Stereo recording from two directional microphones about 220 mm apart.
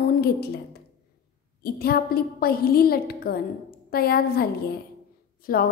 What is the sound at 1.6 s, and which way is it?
A woman's voice, 45° left (ahead or behind).